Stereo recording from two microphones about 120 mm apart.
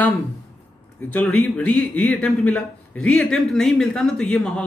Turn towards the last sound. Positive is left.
turn(degrees=5)  # may be behind; listen again after turning